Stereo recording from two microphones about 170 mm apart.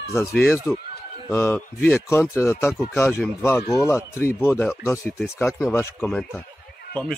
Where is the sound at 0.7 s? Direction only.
10° left (ahead or behind).